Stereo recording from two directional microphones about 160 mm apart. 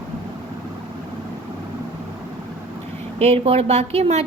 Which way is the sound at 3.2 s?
35° right (ahead or behind).